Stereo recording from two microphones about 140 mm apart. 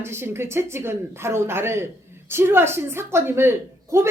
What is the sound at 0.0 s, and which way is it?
A man's voice, 15° right (ahead or behind).